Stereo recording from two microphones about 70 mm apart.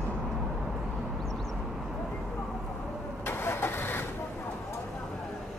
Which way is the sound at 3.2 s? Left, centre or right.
Left.